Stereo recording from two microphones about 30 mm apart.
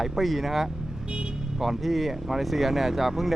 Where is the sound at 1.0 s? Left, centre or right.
Right.